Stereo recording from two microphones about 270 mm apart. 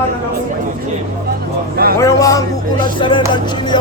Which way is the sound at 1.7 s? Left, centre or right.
Right.